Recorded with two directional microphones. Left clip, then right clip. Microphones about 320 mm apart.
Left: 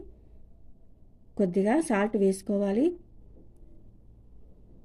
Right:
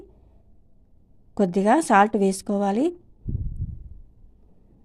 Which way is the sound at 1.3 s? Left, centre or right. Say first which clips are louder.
Right 6 dB; right.